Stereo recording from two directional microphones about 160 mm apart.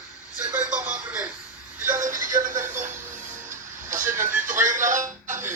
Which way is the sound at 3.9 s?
55° right (ahead or behind).